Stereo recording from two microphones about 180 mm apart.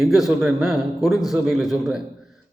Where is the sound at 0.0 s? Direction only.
Centre (ahead or behind).